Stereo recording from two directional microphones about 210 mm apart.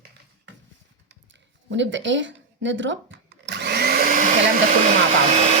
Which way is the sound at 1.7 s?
60° right (ahead or behind).